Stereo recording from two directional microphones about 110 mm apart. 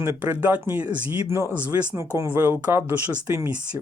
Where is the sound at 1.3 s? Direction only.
25° right (ahead or behind).